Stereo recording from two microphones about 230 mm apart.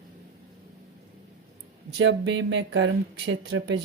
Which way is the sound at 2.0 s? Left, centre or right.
Right.